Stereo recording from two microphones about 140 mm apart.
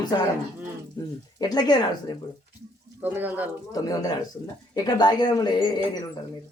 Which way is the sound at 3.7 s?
25° left (ahead or behind).